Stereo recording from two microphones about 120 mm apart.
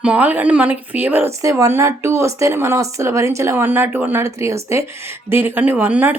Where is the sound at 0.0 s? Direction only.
10° right (ahead or behind).